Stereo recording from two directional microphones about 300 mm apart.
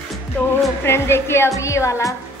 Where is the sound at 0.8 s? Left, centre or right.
Centre.